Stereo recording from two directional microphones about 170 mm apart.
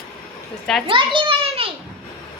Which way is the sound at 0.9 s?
30° right (ahead or behind).